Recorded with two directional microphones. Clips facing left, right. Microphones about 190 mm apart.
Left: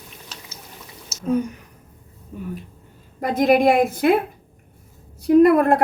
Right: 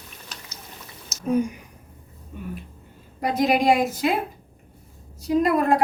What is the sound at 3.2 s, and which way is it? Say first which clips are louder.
Speech: left 4 dB; 50° left (ahead or behind).